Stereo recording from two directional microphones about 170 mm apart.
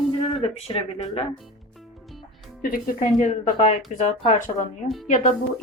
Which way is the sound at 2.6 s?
55° left (ahead or behind).